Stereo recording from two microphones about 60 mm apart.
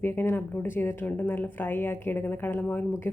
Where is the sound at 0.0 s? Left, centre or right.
Left.